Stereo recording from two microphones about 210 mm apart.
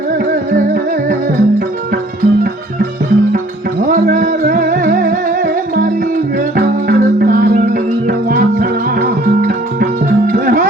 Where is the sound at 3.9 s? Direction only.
40° right (ahead or behind).